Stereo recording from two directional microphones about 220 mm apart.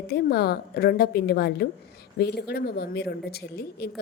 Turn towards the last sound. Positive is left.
turn(degrees=45)  # may be behind; listen again after turning